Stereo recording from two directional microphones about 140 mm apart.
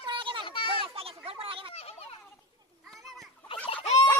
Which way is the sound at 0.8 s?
45° right (ahead or behind).